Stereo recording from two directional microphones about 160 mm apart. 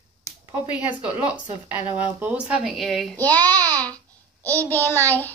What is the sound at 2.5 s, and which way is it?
Speech, centre (ahead or behind).